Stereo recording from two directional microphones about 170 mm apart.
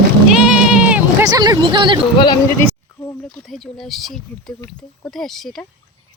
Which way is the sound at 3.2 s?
Centre (ahead or behind).